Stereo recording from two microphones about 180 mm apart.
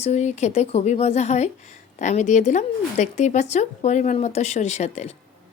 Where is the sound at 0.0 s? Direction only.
40° left (ahead or behind).